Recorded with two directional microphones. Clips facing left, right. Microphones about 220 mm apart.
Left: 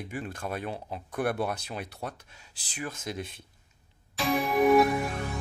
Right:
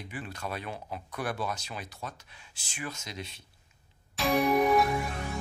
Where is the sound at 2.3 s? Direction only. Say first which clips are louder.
Left 4 dB; 40° left (ahead or behind).